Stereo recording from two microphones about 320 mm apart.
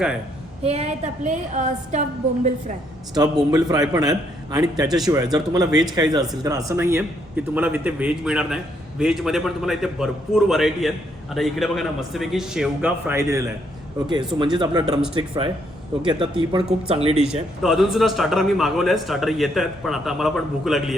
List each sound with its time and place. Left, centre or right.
0.6 s a woman's voice: centre
16.0 s a man's voice: centre
17.6 s a man's voice: centre